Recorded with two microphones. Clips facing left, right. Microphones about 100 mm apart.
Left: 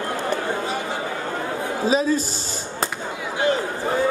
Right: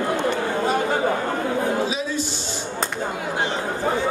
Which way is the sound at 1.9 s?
40° left (ahead or behind).